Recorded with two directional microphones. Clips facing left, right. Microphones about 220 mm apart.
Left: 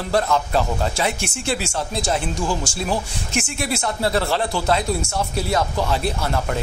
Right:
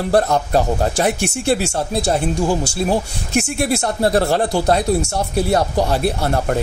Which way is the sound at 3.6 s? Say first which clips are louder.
Right 4 dB; 45° right (ahead or behind).